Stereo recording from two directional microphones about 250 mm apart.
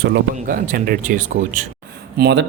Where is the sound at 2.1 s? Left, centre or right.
Right.